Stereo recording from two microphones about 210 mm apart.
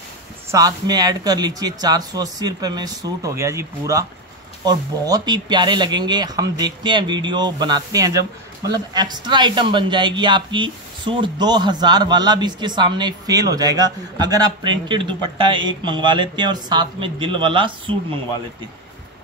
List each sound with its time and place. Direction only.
0.5 s speech: 15° right (ahead or behind)